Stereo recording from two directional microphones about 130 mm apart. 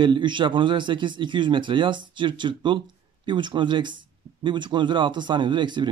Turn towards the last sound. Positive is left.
turn(degrees=-35)  # may be behind; listen again after turning